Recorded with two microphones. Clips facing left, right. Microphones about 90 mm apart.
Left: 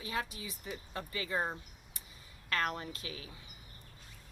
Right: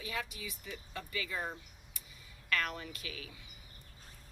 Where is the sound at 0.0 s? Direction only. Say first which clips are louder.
Left 2 dB; 35° left (ahead or behind).